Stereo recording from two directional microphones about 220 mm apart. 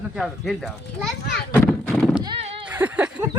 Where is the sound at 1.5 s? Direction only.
10° left (ahead or behind).